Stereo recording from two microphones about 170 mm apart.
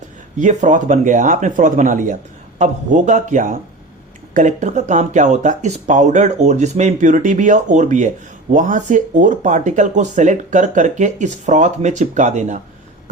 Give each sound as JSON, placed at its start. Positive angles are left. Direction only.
{"t": 0.3, "sound": "speech", "side_deg": -45}